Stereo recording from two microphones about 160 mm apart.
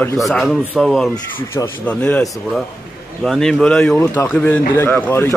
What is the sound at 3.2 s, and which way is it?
Speech, 5° left (ahead or behind).